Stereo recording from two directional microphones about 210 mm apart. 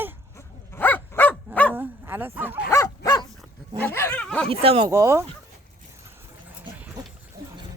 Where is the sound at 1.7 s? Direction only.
10° right (ahead or behind).